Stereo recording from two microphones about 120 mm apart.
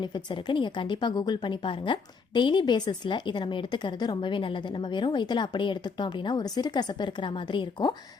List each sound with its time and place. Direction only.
0.0 s a woman's voice: 40° left (ahead or behind)